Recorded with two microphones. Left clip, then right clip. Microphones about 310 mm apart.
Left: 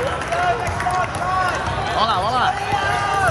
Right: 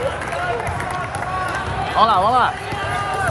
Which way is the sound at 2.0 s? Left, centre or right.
Right.